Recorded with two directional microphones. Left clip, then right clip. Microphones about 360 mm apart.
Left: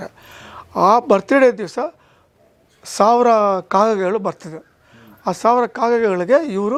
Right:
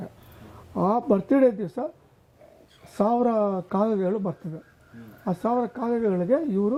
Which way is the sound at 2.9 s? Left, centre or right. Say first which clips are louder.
Left 10 dB; centre.